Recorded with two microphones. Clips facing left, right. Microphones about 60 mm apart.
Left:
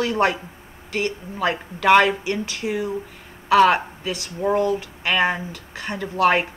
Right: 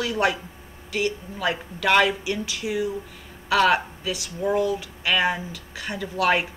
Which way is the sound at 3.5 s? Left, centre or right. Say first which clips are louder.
Left 4 dB; left.